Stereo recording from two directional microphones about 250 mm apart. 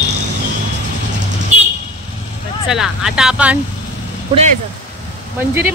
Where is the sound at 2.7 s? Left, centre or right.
Centre.